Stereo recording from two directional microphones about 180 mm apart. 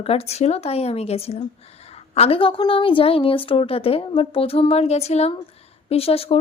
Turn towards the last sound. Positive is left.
turn(degrees=35)  # may be behind; listen again after turning